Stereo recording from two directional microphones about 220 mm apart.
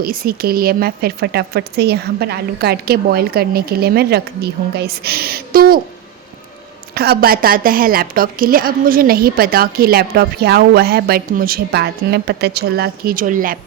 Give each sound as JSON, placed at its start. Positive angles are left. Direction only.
{"t": 0.0, "sound": "a woman's voice", "side_deg": -40}
{"t": 6.9, "sound": "a woman's voice", "side_deg": -45}